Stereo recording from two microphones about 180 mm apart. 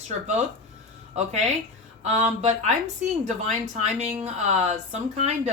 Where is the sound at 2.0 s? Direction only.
40° right (ahead or behind).